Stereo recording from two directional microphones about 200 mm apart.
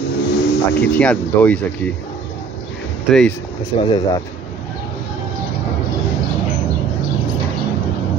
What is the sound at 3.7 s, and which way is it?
Speech, 25° left (ahead or behind).